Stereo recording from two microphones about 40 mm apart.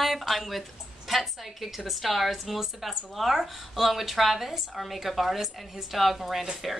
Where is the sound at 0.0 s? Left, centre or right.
Centre.